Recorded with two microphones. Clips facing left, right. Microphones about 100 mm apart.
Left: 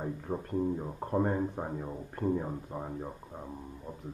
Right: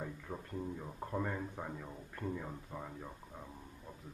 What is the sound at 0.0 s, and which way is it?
Speech, 35° left (ahead or behind).